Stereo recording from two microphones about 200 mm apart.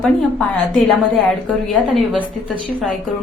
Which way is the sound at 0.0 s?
5° left (ahead or behind).